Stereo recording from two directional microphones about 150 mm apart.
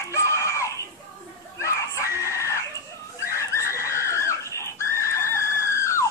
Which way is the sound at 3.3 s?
20° left (ahead or behind).